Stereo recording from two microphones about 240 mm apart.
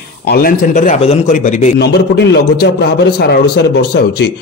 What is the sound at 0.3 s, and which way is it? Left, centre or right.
A man's voice, left.